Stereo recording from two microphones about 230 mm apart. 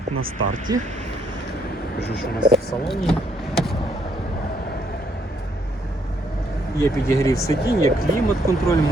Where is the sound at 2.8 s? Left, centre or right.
Centre.